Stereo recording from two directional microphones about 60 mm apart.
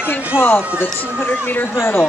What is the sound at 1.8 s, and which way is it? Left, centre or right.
Speech, left.